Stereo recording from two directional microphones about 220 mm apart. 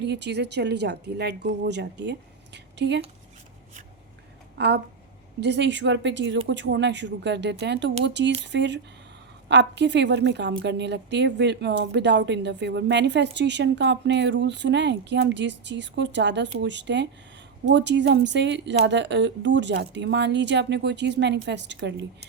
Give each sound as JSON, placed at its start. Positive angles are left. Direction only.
{"t": 0.0, "sound": "a woman's voice", "side_deg": -50}
{"t": 4.5, "sound": "a woman's voice", "side_deg": -50}